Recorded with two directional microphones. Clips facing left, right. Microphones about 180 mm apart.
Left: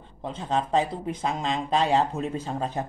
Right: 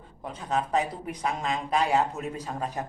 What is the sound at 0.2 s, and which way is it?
Speech, 30° left (ahead or behind).